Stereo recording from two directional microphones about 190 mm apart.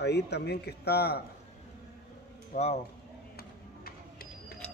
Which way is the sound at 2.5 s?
35° left (ahead or behind).